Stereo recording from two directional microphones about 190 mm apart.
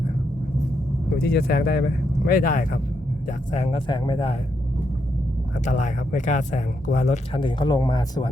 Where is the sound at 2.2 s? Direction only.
50° left (ahead or behind).